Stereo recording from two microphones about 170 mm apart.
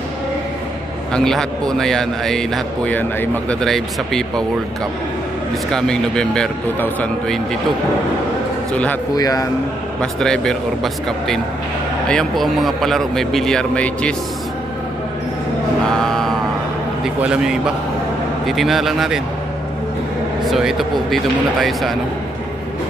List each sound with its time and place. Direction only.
1.1 s a man's voice: 5° left (ahead or behind)
5.7 s a man's voice: 5° left (ahead or behind)
9.1 s a man's voice: 20° left (ahead or behind)
10.2 s a man's voice: 5° left (ahead or behind)
15.9 s mantra: centre (ahead or behind)
17.0 s a man's voice: 5° right (ahead or behind)
20.4 s a man's voice: centre (ahead or behind)